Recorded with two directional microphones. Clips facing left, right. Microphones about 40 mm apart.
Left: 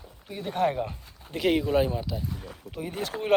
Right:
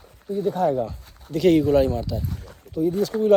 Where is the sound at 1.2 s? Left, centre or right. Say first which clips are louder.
Right 7 dB; left.